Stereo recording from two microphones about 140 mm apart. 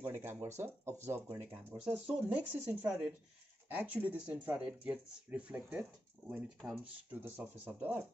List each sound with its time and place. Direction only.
0.1 s speech: 15° right (ahead or behind)
6.6 s speech: centre (ahead or behind)
7.1 s speech: 15° right (ahead or behind)